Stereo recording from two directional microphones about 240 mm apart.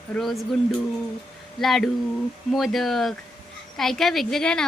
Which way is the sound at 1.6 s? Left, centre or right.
Centre.